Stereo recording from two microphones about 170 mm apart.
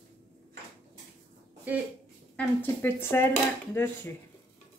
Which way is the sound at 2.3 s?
5° left (ahead or behind).